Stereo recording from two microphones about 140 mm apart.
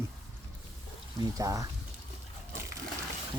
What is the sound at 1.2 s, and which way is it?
Speech, 25° right (ahead or behind).